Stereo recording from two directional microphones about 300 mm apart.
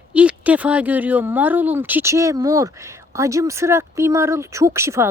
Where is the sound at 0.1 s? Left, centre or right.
Centre.